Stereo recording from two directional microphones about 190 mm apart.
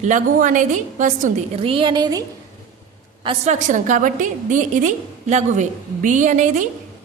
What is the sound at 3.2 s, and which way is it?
A woman's voice, 35° right (ahead or behind).